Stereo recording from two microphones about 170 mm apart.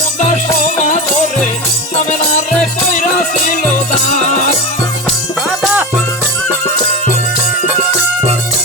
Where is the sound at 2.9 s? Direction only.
50° left (ahead or behind).